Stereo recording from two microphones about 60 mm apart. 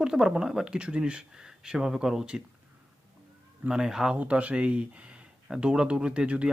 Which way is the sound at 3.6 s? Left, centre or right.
Centre.